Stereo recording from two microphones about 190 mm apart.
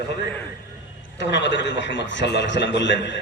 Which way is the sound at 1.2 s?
70° left (ahead or behind).